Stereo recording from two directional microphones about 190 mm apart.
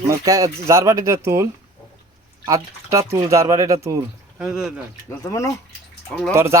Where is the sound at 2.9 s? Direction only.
15° right (ahead or behind).